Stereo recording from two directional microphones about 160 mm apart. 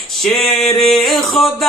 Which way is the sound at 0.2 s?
Centre (ahead or behind).